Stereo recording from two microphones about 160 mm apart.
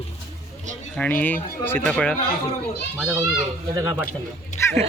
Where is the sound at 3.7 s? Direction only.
20° right (ahead or behind).